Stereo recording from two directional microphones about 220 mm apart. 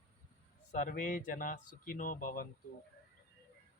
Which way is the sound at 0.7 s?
35° left (ahead or behind).